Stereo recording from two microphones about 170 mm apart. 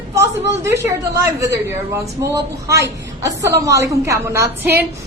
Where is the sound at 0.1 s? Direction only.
15° right (ahead or behind).